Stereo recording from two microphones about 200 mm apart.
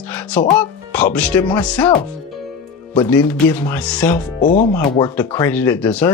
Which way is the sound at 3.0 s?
10° left (ahead or behind).